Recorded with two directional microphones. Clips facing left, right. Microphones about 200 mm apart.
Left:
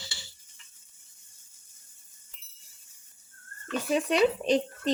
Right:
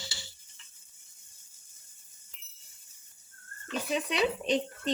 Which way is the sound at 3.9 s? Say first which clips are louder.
Left 6 dB; 45° left (ahead or behind).